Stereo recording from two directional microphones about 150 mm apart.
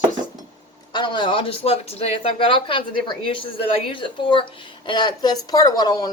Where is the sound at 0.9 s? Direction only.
30° left (ahead or behind).